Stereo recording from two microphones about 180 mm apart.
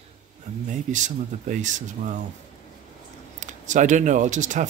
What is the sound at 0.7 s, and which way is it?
Speech, 45° right (ahead or behind).